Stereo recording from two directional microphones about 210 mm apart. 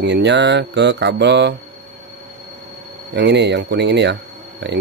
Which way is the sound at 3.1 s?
55° right (ahead or behind).